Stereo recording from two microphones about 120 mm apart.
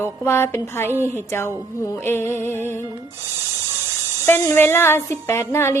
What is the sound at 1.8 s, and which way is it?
Speech, 20° left (ahead or behind).